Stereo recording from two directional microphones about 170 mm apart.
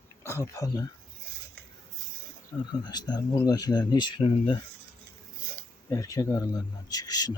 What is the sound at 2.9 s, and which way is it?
Speech, 25° left (ahead or behind).